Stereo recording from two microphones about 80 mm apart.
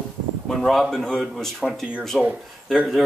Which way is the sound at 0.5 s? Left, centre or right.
Centre.